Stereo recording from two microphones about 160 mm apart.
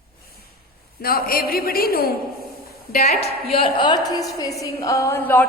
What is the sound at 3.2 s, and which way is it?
A woman's voice, 35° left (ahead or behind).